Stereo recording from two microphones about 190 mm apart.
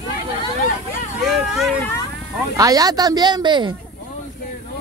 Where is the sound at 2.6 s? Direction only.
20° right (ahead or behind).